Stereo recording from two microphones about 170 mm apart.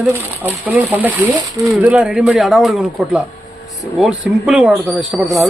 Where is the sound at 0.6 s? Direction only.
10° right (ahead or behind).